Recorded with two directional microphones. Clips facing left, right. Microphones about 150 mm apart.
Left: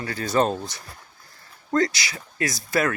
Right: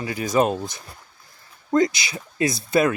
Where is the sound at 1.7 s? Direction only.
20° right (ahead or behind).